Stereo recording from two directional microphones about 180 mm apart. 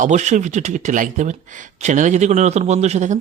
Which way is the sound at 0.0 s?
40° right (ahead or behind).